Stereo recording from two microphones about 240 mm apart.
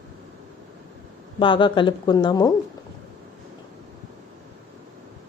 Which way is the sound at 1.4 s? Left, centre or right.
Left.